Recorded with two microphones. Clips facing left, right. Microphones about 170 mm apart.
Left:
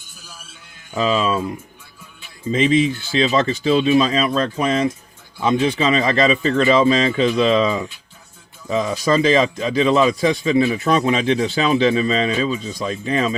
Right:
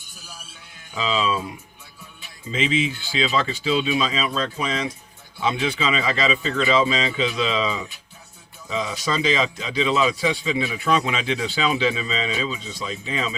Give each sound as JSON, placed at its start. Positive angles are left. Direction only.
{"t": 0.9, "sound": "a man's voice", "side_deg": 50}
{"t": 2.5, "sound": "a man's voice", "side_deg": 40}